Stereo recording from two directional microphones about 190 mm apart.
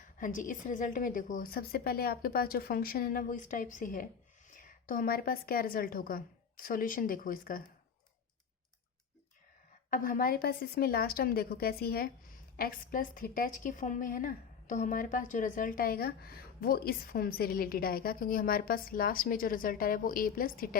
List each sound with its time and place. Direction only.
0.0 s a woman's voice: 45° left (ahead or behind)
9.9 s a woman's voice: 45° left (ahead or behind)